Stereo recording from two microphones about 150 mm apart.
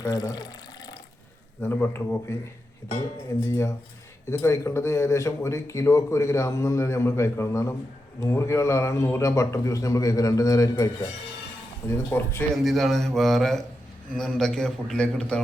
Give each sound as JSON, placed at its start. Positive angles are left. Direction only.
{"t": 0.0, "sound": "water", "side_deg": 25}
{"t": 1.6, "sound": "speech", "side_deg": 15}
{"t": 12.6, "sound": "a man's voice", "side_deg": 0}